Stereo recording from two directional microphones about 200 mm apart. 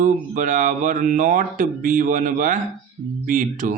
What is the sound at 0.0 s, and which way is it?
Speech, 40° right (ahead or behind).